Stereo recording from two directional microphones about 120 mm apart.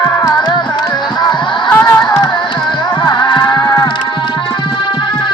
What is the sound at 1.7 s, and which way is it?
Music, 15° left (ahead or behind).